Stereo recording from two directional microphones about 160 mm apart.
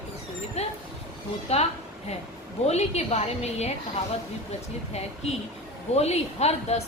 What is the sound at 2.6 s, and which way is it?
Speech, 45° left (ahead or behind).